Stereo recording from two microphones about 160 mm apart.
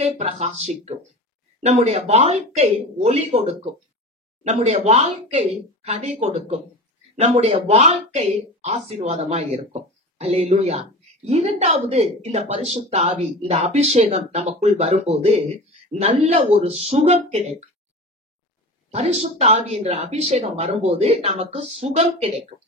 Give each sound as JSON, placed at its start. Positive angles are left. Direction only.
{"t": 0.0, "sound": "speech", "side_deg": -40}
{"t": 18.9, "sound": "speech", "side_deg": -40}